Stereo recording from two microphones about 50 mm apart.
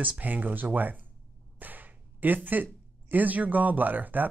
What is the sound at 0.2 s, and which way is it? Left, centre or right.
Speech, right.